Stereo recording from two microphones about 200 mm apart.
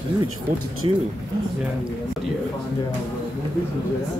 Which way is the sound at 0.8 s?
25° right (ahead or behind).